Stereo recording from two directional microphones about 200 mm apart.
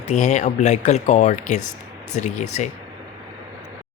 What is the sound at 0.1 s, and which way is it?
Speech, 35° left (ahead or behind).